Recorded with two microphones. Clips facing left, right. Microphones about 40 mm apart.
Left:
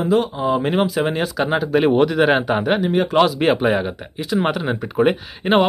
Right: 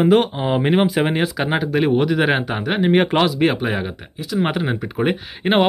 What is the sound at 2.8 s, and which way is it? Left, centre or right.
Speech, right.